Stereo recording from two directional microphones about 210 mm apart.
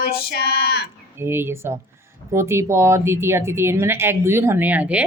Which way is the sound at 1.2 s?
10° right (ahead or behind).